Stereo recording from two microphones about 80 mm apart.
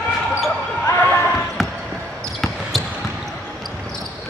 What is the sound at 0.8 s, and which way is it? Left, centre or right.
Basketball bounce, left.